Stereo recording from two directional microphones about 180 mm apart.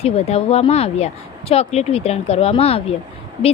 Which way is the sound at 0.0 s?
35° left (ahead or behind).